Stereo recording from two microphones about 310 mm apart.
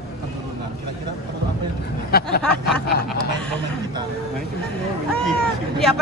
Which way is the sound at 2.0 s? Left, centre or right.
Left.